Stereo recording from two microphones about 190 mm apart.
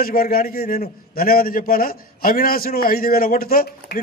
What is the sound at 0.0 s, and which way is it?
A man's voice, 50° left (ahead or behind).